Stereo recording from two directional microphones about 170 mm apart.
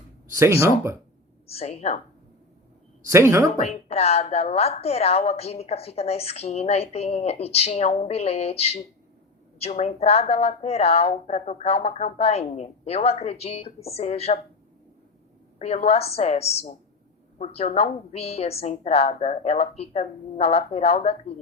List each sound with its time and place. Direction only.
0.3 s speech: 15° right (ahead or behind)
1.5 s a woman's voice: 35° left (ahead or behind)
3.1 s speech: 15° right (ahead or behind)
3.6 s a woman's voice: 35° left (ahead or behind)
15.5 s a woman's voice: 35° left (ahead or behind)